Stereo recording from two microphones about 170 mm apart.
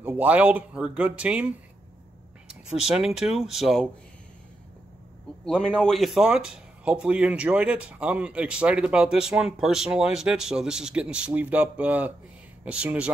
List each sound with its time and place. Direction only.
0.0 s speech: 10° right (ahead or behind)
5.4 s speech: 5° left (ahead or behind)